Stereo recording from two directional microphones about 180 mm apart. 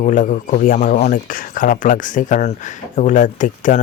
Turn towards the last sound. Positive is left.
turn(degrees=45)  # may be behind; listen again after turning